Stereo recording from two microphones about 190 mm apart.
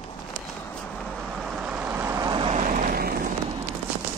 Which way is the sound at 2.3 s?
30° right (ahead or behind).